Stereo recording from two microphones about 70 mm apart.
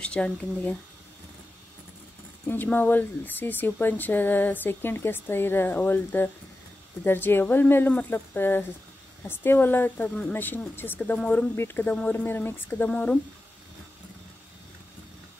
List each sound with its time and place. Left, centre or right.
0.0 s speech: centre
2.4 s speech: left
10.3 s speech: left